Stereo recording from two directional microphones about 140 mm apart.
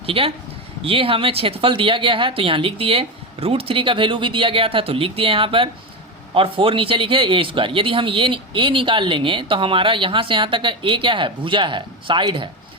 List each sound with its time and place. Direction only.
0.0 s a man's voice: 40° right (ahead or behind)